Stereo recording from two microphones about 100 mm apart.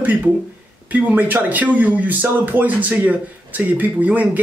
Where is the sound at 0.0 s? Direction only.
15° right (ahead or behind).